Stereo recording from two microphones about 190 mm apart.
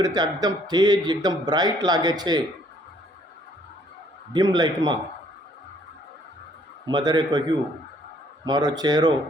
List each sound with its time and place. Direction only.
0.0 s a man's voice: 20° right (ahead or behind)
4.3 s a man's voice: 20° right (ahead or behind)
6.8 s a man's voice: 20° right (ahead or behind)
8.4 s a man's voice: 20° right (ahead or behind)